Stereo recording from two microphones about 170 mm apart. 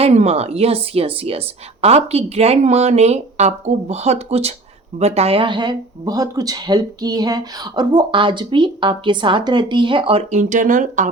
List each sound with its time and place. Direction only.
0.0 s a woman's voice: 40° right (ahead or behind)
10.3 s speech: 50° right (ahead or behind)